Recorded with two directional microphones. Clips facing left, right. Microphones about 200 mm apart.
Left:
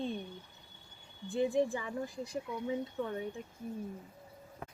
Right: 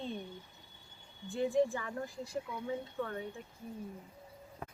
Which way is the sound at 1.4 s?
15° left (ahead or behind).